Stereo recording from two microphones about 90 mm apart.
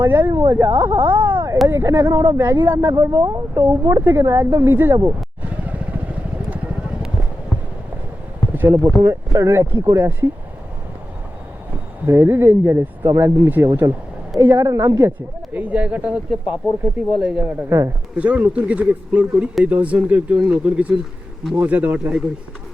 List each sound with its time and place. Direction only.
0.0 s speech: 25° right (ahead or behind)
2.0 s speech: 50° right (ahead or behind)
2.4 s speech: 25° right (ahead or behind)
2.9 s speech: 40° right (ahead or behind); by 4.9 s 25° right (ahead or behind)
5.4 s vehicle: 15° right (ahead or behind)
8.7 s speech: 30° right (ahead or behind)
12.0 s speech: 30° right (ahead or behind)
15.5 s speech: 15° right (ahead or behind)
17.7 s speech: 30° right (ahead or behind)
18.2 s speech: 15° right (ahead or behind)